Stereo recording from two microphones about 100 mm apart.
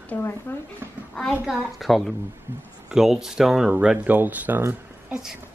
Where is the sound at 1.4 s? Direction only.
Centre (ahead or behind); by 5.1 s 20° right (ahead or behind).